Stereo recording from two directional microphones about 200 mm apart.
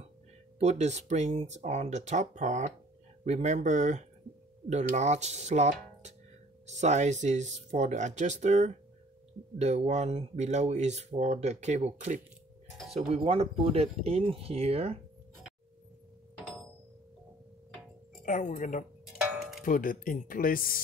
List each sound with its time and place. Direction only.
0.6 s speech: 35° right (ahead or behind)
18.2 s speech: 40° left (ahead or behind)